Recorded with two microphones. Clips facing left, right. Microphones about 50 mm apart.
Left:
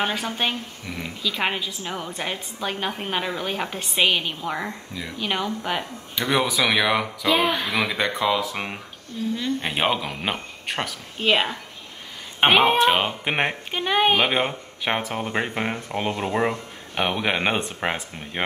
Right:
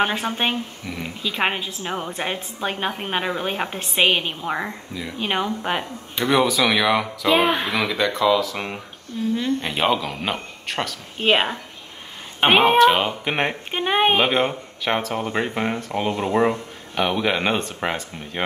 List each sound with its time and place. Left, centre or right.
0.0 s a woman's voice: right
0.9 s speech: centre
1.2 s a woman's voice: right
3.9 s a woman's voice: right
4.2 s a woman's voice: right
6.3 s speech: centre
7.4 s a woman's voice: right
7.8 s speech: centre
9.1 s a woman's voice: centre
9.6 s speech: centre
11.1 s a woman's voice: right
12.8 s speech: centre
13.7 s a woman's voice: right
14.3 s a man's voice: centre